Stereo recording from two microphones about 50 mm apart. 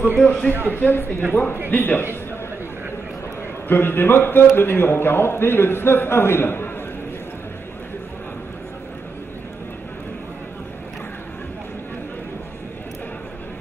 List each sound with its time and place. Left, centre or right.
0.2 s a man's voice: centre
0.5 s a man's voice: right
0.7 s a man's voice: left
3.6 s a man's voice: left